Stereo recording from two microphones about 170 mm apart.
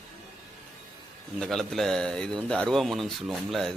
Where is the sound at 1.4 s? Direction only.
Centre (ahead or behind).